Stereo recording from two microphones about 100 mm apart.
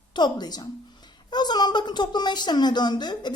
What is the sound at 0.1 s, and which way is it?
A woman's voice, 45° left (ahead or behind).